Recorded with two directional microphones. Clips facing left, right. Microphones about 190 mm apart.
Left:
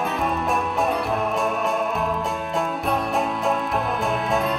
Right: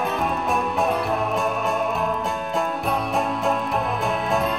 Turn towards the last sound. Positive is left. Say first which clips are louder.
# even
turn(degrees=0)  # may be behind; listen again after turning